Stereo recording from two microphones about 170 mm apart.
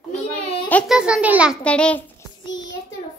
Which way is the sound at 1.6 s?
5° left (ahead or behind).